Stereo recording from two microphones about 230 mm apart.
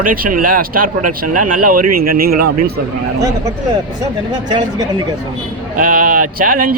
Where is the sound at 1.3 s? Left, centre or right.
Right.